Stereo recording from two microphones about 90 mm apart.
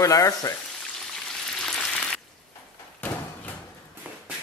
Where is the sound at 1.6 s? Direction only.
5° left (ahead or behind).